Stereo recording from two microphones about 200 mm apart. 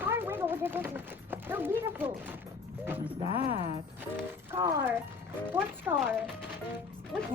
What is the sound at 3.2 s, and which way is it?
Speech, 30° left (ahead or behind).